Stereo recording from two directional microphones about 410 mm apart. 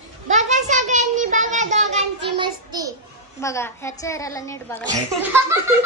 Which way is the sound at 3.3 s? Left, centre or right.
Centre.